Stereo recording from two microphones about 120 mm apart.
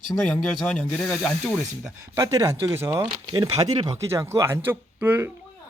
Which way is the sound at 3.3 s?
35° right (ahead or behind).